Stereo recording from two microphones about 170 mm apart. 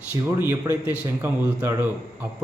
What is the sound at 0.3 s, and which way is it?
A man's voice, 15° right (ahead or behind).